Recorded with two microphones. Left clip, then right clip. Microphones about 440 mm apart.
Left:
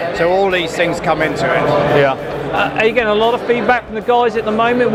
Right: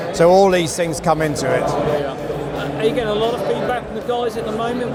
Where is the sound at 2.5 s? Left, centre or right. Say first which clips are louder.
Left 7 dB; left.